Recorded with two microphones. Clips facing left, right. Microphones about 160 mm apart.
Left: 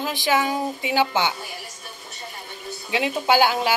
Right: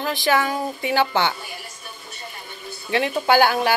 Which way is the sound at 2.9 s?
15° left (ahead or behind).